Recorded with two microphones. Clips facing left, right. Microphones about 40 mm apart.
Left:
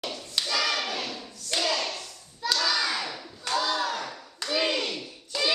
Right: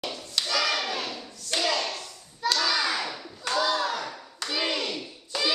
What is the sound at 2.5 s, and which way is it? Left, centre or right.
Hands, centre.